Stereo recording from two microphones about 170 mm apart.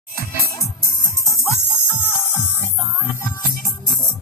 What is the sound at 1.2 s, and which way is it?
Music, 10° left (ahead or behind).